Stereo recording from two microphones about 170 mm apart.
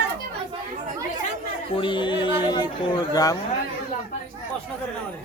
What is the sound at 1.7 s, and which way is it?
Speech, 30° left (ahead or behind).